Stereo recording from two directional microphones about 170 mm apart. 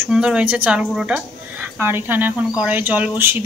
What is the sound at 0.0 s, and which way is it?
A woman's voice, 5° right (ahead or behind).